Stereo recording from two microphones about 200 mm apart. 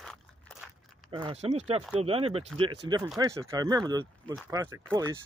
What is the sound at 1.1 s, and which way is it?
Speech, 25° right (ahead or behind).